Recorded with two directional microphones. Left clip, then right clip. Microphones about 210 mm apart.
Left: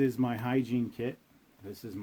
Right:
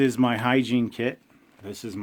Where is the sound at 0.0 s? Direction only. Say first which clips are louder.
Right 8 dB; 40° right (ahead or behind).